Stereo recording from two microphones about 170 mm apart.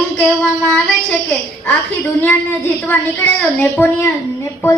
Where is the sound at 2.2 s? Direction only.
10° left (ahead or behind).